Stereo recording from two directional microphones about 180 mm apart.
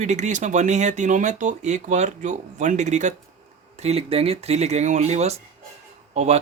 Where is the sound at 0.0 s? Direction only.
40° right (ahead or behind).